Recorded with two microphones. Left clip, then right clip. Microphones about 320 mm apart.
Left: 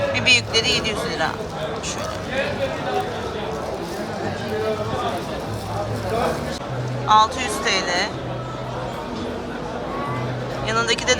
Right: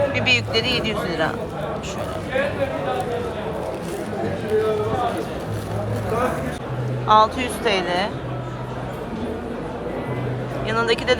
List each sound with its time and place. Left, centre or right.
0.1 s speech: centre
7.1 s speech: centre
10.7 s speech: centre